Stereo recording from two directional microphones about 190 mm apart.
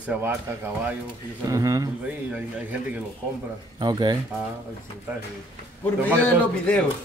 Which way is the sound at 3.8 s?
20° right (ahead or behind).